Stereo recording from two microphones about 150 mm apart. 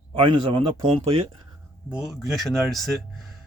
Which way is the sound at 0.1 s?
35° right (ahead or behind).